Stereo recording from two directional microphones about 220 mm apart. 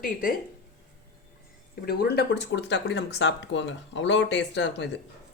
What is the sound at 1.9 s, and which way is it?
Speech, 45° left (ahead or behind).